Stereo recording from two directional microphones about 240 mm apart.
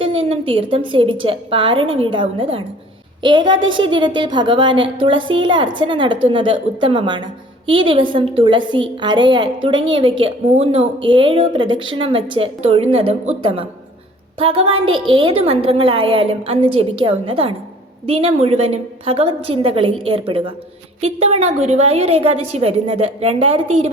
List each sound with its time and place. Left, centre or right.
0.0 s a woman's voice: right